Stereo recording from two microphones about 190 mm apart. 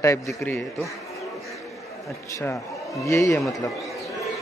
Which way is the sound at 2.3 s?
15° left (ahead or behind).